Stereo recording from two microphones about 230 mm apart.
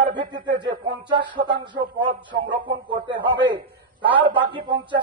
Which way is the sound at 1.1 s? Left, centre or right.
Centre.